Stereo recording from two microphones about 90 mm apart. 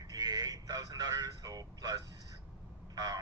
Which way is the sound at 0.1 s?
45° right (ahead or behind).